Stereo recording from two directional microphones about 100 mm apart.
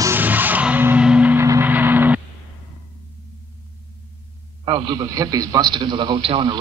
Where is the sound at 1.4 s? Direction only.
25° right (ahead or behind).